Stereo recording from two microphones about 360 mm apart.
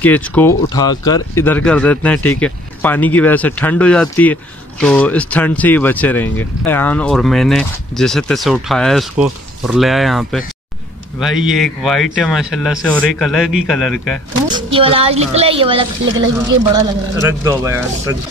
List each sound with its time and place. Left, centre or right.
0.0 s speech: centre
14.5 s a woman's voice: centre
17.3 s a woman's voice: centre